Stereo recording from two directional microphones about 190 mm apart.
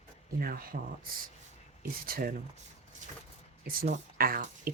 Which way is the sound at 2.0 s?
50° right (ahead or behind).